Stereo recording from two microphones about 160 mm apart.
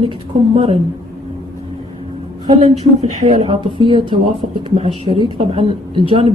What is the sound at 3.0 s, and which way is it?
Speech, 45° right (ahead or behind).